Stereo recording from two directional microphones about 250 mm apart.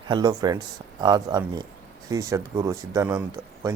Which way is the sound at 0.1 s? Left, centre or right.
Centre.